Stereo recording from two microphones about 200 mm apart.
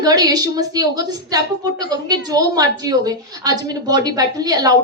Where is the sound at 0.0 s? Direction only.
20° right (ahead or behind).